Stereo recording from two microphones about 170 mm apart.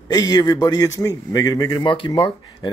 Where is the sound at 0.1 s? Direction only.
20° left (ahead or behind).